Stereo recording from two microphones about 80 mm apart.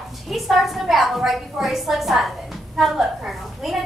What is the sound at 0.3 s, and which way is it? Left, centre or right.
A woman's voice, centre.